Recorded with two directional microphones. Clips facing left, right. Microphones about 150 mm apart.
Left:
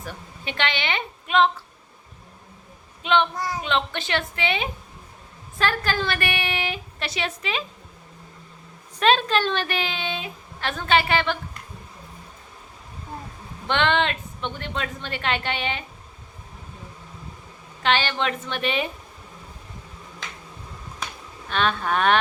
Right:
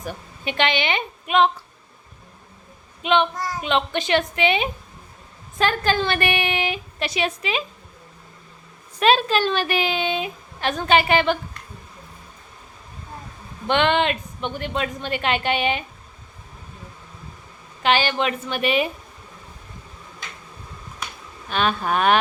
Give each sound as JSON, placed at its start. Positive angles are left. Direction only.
{"t": 0.0, "sound": "a woman's voice", "side_deg": -15}
{"t": 3.0, "sound": "child singing", "side_deg": -15}
{"t": 3.6, "sound": "a woman's voice", "side_deg": -15}
{"t": 9.0, "sound": "a woman's voice", "side_deg": -10}
{"t": 13.7, "sound": "a woman's voice", "side_deg": -15}
{"t": 17.8, "sound": "a woman's voice", "side_deg": -15}
{"t": 21.5, "sound": "a woman's voice", "side_deg": -10}